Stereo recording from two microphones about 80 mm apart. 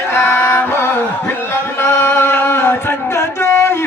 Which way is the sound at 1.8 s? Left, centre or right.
Left.